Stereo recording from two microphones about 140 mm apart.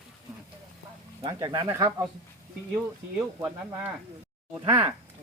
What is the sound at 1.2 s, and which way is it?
Speech, 25° right (ahead or behind).